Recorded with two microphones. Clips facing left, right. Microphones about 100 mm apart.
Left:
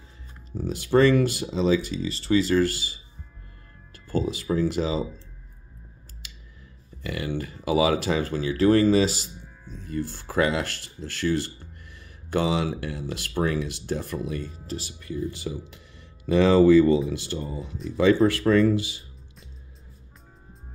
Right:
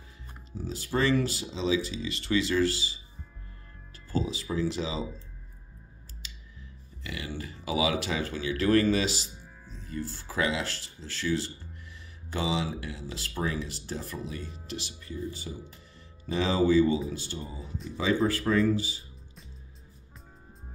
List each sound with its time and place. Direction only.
0.5 s speech: 60° left (ahead or behind)
2.0 s speech: 35° left (ahead or behind); by 3.0 s 50° left (ahead or behind)
4.3 s speech: 55° left (ahead or behind)
7.0 s speech: 50° left (ahead or behind); by 9.1 s 35° left (ahead or behind)
9.8 s speech: 55° left (ahead or behind)
14.7 s speech: 45° left (ahead or behind)
15.3 s speech: 85° left
16.3 s speech: 65° left (ahead or behind)